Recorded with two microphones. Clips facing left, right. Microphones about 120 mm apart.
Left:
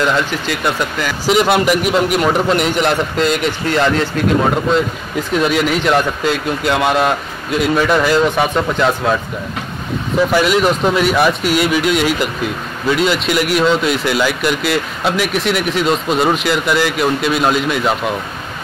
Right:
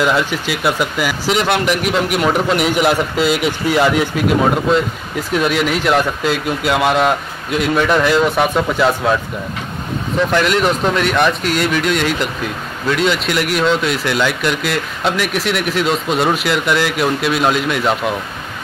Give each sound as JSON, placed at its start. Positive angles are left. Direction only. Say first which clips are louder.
{"t": 0.0, "sound": "speech", "louder": "even", "side_deg": -5}
{"t": 1.3, "sound": "speech", "louder": "left 4 dB", "side_deg": 0}
{"t": 10.3, "sound": "speech", "louder": "left 1 dB", "side_deg": 5}